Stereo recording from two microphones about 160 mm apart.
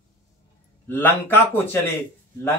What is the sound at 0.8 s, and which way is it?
Speech, 15° left (ahead or behind).